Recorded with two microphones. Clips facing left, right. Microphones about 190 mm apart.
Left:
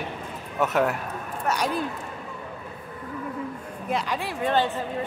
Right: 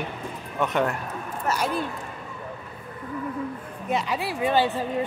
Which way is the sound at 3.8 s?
5° right (ahead or behind).